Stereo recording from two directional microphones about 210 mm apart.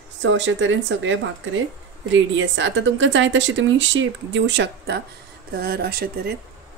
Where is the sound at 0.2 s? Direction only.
60° right (ahead or behind).